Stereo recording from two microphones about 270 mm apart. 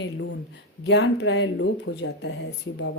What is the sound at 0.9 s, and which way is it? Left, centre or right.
A woman's voice, left.